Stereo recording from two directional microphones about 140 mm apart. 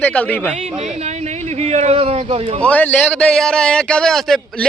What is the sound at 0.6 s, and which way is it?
A man's voice, 55° right (ahead or behind).